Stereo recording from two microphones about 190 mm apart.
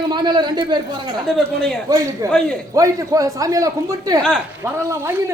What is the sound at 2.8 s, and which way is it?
A man's voice, 15° right (ahead or behind).